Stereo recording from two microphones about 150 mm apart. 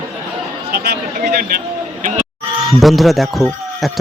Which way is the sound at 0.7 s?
90° right.